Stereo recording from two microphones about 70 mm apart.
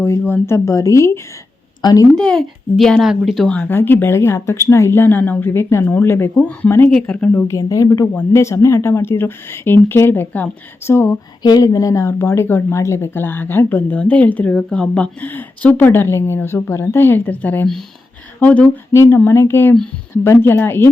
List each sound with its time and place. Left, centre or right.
0.0 s speech: left
1.8 s a woman's voice: left
2.1 s speech: centre
3.0 s speech: centre
3.7 s speech: left
5.5 s speech: left
6.9 s speech: centre
7.4 s speech: left
10.8 s speech: left
11.4 s speech: left
12.2 s speech: left
13.9 s speech: centre
18.9 s speech: left